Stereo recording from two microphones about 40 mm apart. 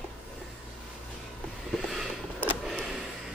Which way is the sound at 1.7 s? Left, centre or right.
Centre.